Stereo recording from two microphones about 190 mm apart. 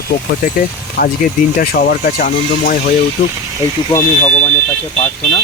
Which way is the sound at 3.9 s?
15° left (ahead or behind).